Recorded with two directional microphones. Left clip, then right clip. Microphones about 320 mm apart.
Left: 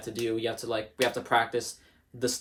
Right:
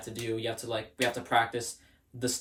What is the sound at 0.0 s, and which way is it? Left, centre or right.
Speech, centre.